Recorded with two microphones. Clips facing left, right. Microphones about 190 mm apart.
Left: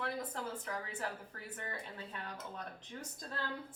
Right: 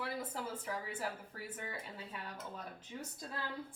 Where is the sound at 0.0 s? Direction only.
5° right (ahead or behind).